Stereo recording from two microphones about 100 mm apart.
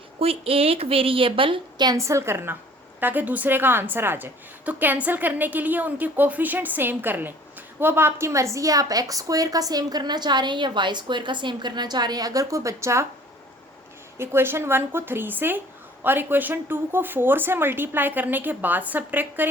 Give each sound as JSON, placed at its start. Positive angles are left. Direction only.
{"t": 0.2, "sound": "a woman's voice", "side_deg": -75}
{"t": 2.0, "sound": "a woman's voice", "side_deg": -30}
{"t": 14.2, "sound": "speech", "side_deg": -25}